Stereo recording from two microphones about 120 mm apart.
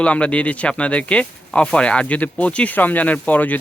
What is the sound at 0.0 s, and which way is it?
Speech, 10° left (ahead or behind).